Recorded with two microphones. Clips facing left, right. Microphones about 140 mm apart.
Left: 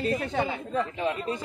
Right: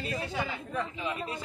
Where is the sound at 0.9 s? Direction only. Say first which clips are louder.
Left 6 dB; 40° left (ahead or behind).